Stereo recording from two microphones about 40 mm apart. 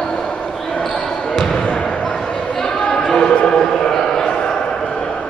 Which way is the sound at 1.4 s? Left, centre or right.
Left.